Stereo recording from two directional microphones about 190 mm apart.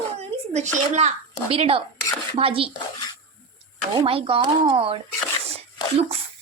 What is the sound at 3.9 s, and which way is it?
A woman's voice, 30° right (ahead or behind).